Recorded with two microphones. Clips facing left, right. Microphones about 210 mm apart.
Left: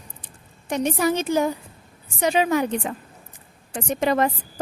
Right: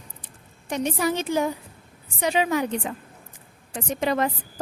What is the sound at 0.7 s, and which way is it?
Speech, 45° left (ahead or behind).